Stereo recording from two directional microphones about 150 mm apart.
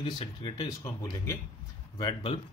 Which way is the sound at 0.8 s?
20° left (ahead or behind).